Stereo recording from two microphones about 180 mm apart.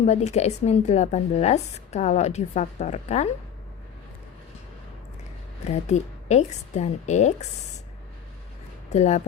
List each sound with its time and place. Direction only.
0.0 s a woman's voice: 35° left (ahead or behind)
5.6 s a woman's voice: 40° left (ahead or behind)
8.9 s a woman's voice: 40° left (ahead or behind)